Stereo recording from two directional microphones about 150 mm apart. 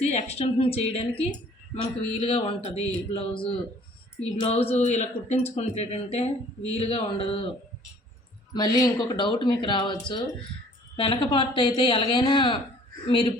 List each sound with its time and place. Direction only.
0.1 s a man's voice: 45° left (ahead or behind)
8.5 s a man's voice: 30° left (ahead or behind)